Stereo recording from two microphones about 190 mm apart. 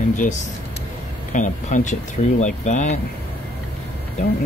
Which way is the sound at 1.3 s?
40° left (ahead or behind).